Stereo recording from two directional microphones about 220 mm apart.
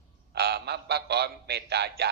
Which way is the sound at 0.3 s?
45° right (ahead or behind).